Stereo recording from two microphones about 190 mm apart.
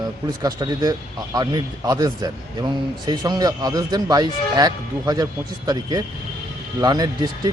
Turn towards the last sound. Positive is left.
turn(degrees=-20)  # may be behind; listen again after turning